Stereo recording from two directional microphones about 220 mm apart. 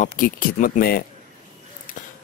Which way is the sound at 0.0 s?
35° left (ahead or behind).